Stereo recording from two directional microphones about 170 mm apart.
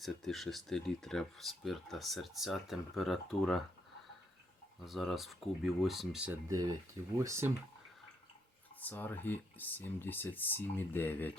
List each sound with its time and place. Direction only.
0.0 s speech: centre (ahead or behind)
4.8 s speech: centre (ahead or behind)
6.5 s speech: 20° right (ahead or behind)
8.8 s speech: 10° left (ahead or behind)